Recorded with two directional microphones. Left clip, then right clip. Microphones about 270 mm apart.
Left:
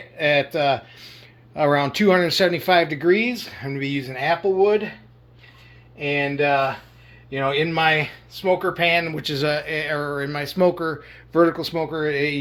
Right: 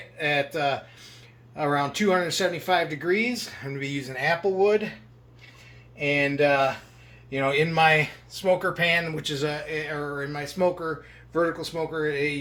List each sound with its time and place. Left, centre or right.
0.2 s speech: left; by 4.9 s centre
6.0 s speech: centre; by 12.4 s left